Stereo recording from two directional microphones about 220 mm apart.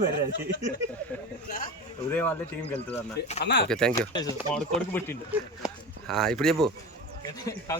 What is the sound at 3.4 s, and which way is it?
Speech, 50° left (ahead or behind).